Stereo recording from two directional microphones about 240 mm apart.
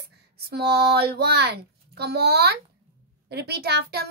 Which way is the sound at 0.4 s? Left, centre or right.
Right.